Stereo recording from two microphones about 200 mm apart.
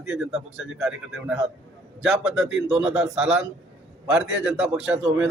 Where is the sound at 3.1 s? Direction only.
5° right (ahead or behind).